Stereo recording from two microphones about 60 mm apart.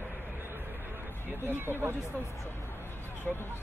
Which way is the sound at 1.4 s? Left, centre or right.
Right.